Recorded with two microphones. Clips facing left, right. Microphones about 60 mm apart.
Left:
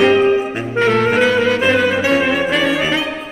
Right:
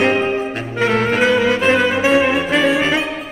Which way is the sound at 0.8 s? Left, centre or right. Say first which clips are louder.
Left 2 dB; centre.